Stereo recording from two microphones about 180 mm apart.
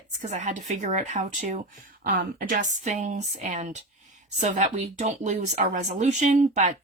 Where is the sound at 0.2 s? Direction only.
40° right (ahead or behind).